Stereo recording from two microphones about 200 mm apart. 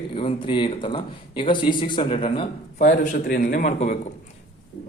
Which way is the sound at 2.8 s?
40° left (ahead or behind).